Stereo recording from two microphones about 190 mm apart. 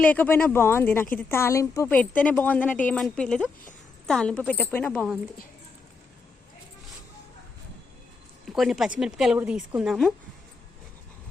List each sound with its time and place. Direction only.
0.0 s a woman's voice: 10° left (ahead or behind)
8.4 s speech: centre (ahead or behind)